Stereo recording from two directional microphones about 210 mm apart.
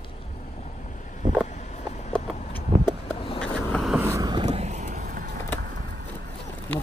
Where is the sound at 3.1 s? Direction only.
25° left (ahead or behind).